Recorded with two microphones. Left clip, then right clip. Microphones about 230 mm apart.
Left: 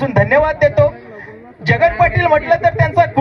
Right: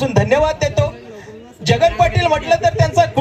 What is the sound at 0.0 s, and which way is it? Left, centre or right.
A man's voice, right.